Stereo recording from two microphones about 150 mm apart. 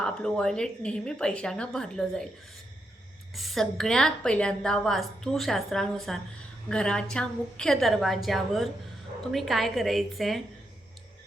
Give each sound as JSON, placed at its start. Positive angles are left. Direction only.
{"t": 0.0, "sound": "a woman's voice", "side_deg": 5}
{"t": 3.3, "sound": "a woman's voice", "side_deg": 0}